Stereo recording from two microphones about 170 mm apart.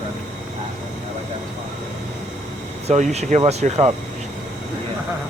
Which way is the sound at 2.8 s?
40° right (ahead or behind).